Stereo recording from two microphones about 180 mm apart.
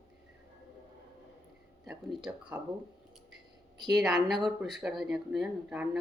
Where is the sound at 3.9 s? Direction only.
Centre (ahead or behind).